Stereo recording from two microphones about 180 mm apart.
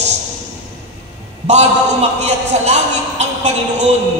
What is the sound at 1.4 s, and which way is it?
A man's voice, 35° right (ahead or behind).